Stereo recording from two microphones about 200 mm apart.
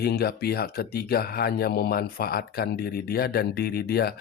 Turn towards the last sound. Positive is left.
turn(degrees=50)  # may be behind; listen again after turning